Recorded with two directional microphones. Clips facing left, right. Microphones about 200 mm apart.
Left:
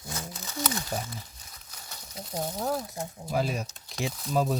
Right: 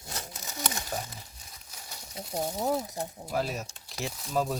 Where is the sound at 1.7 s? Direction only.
10° right (ahead or behind).